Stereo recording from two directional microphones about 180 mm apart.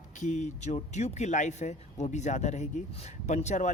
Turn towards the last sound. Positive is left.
turn(degrees=40)  # may be behind; listen again after turning